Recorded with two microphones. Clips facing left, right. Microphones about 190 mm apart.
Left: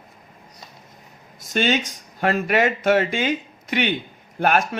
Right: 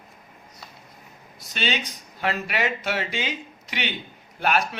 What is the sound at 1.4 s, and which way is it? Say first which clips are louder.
A man's voice: left 8 dB; 50° left (ahead or behind).